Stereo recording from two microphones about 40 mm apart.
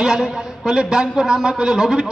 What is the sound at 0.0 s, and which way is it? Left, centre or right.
A man's voice, centre.